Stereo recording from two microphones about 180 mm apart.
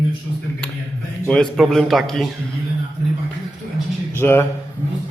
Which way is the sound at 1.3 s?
Centre (ahead or behind).